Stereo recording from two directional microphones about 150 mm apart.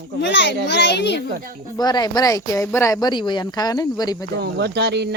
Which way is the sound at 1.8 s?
25° left (ahead or behind).